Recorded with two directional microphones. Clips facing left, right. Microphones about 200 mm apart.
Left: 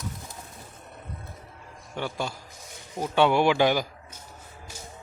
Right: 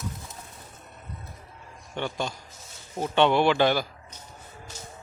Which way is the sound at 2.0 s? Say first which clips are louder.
Right 1 dB; 5° left (ahead or behind).